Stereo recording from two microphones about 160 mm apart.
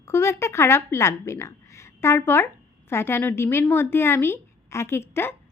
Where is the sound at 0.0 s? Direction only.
15° left (ahead or behind).